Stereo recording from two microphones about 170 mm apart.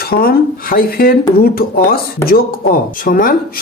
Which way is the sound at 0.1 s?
65° left (ahead or behind).